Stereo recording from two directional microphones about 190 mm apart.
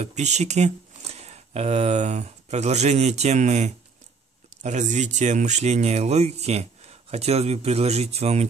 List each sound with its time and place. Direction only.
0.0 s speech: 35° right (ahead or behind)